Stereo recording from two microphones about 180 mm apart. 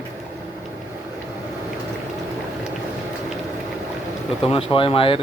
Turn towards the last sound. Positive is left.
turn(degrees=30)  # may be behind; listen again after turning